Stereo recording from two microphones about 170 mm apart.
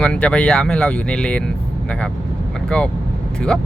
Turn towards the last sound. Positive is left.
turn(degrees=5)  # may be behind; listen again after turning